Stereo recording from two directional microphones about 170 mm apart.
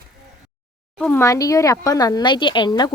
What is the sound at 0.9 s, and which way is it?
A woman's voice, 10° left (ahead or behind).